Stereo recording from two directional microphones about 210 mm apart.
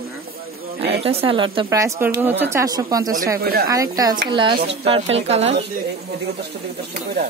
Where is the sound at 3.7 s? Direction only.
15° right (ahead or behind).